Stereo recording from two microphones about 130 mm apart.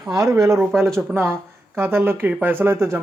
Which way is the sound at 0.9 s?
20° right (ahead or behind).